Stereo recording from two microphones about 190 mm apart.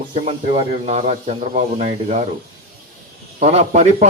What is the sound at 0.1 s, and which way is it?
A man's voice, 30° right (ahead or behind).